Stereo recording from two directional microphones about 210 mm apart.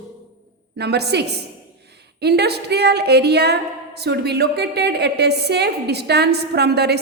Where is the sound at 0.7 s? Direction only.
50° right (ahead or behind).